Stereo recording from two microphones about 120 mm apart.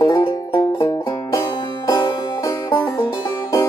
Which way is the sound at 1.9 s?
35° left (ahead or behind).